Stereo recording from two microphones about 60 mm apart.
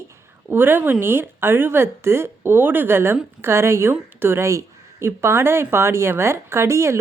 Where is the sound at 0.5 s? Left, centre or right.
Right.